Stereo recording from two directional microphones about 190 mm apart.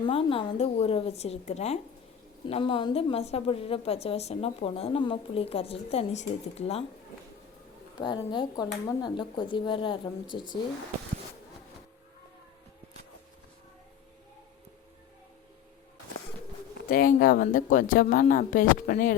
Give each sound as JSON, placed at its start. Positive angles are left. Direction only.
{"t": 0.0, "sound": "a woman's voice", "side_deg": 30}
{"t": 7.9, "sound": "speech", "side_deg": 25}
{"t": 16.9, "sound": "speech", "side_deg": 50}